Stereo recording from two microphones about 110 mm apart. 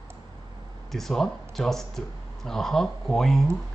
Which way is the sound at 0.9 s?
5° left (ahead or behind).